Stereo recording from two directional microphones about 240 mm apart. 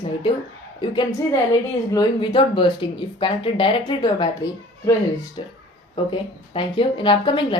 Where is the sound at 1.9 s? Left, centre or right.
Centre.